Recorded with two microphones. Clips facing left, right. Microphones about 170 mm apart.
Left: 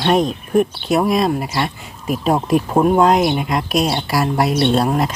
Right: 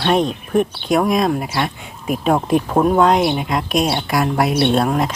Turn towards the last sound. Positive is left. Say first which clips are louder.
# even
turn(degrees=0)  # may be behind; listen again after turning